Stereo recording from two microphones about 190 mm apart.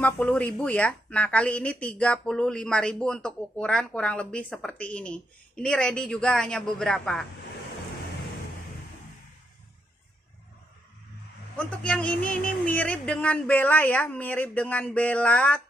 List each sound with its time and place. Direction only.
0.0 s a woman's voice: 10° left (ahead or behind)
11.5 s a man's voice: 5° left (ahead or behind)